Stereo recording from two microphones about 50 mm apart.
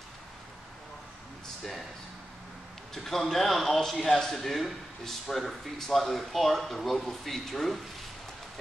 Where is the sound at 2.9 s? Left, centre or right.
Centre.